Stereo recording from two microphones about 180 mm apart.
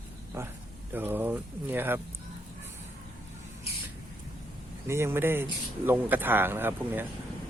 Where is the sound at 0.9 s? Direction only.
10° right (ahead or behind).